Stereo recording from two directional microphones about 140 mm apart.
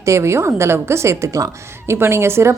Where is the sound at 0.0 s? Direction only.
20° right (ahead or behind).